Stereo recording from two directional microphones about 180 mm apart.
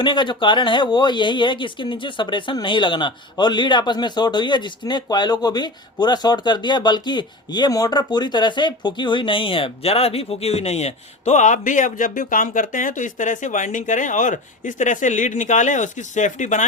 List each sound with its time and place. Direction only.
0.0 s speech: 25° left (ahead or behind); by 16.6 s 45° left (ahead or behind)